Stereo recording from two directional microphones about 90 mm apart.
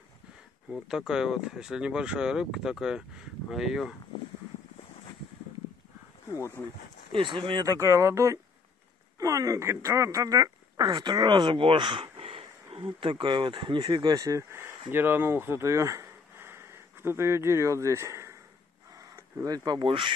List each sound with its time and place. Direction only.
0.7 s speech: 5° right (ahead or behind)
6.3 s speech: 30° left (ahead or behind)
7.1 s speech: 65° right (ahead or behind)
7.6 s speech: 35° right (ahead or behind); by 12.4 s 80° right
12.8 s speech: 65° right (ahead or behind); by 14.4 s 45° right (ahead or behind)
14.9 s speech: 25° right (ahead or behind)
19.4 s speech: 50° right (ahead or behind); by 20.1 s 70° right (ahead or behind)